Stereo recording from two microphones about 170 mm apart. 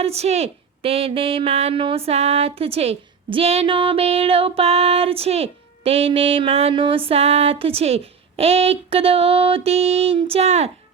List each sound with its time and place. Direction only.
0.0 s speech: 40° right (ahead or behind)